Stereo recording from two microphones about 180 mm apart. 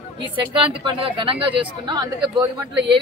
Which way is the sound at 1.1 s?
30° right (ahead or behind).